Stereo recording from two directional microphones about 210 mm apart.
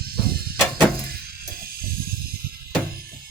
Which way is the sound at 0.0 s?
45° right (ahead or behind).